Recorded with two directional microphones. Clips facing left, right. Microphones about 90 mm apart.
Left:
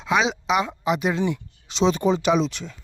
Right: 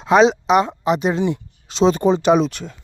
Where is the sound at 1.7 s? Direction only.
40° right (ahead or behind).